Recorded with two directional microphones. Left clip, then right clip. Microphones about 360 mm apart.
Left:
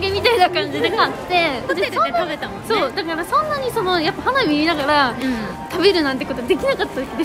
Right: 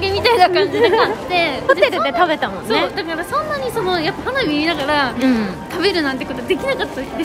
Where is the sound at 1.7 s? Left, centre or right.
Centre.